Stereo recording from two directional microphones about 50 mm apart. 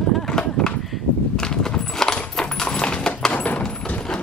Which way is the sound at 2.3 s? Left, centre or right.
Centre.